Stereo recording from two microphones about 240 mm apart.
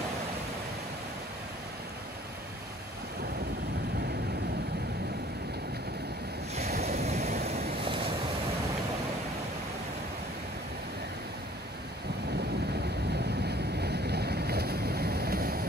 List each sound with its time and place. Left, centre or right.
6.5 s waves: right
13.1 s boat: right